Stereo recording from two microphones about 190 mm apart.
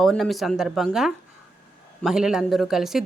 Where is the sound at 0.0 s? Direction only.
Centre (ahead or behind).